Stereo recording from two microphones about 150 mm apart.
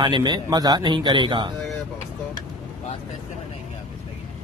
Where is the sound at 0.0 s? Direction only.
30° right (ahead or behind).